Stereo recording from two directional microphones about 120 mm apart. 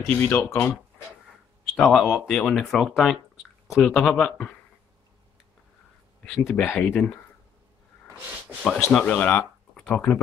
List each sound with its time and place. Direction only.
0.1 s speech: 20° left (ahead or behind)
1.8 s speech: 5° left (ahead or behind)
6.2 s speech: 5° left (ahead or behind)
8.6 s speech: 5° left (ahead or behind)